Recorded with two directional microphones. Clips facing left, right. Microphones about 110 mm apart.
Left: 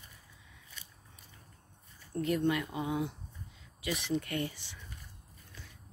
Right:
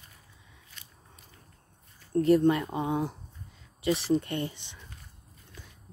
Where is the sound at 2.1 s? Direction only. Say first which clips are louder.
Right 8 dB; 35° right (ahead or behind); by 4.8 s 20° right (ahead or behind).